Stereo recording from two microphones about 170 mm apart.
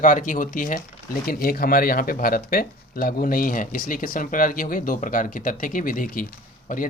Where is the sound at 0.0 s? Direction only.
50° left (ahead or behind).